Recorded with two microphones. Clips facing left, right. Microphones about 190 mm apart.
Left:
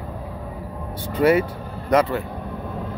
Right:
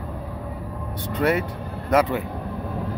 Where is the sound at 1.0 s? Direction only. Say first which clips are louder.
Left 5 dB; 5° left (ahead or behind).